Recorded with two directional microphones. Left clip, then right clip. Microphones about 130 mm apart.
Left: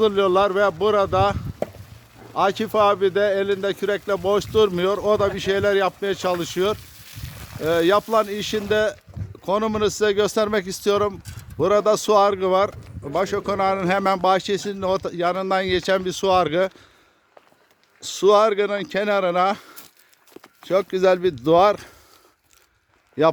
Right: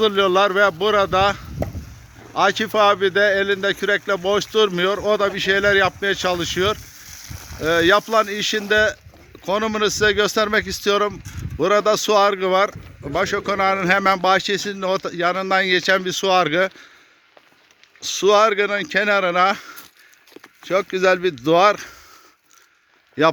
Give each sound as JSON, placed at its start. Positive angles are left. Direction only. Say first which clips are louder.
{"t": 0.0, "sound": "speech", "louder": "right 1 dB", "side_deg": 5}
{"t": 18.0, "sound": "speech", "louder": "right 1 dB", "side_deg": 20}
{"t": 23.2, "sound": "speech", "louder": "right 1 dB", "side_deg": 15}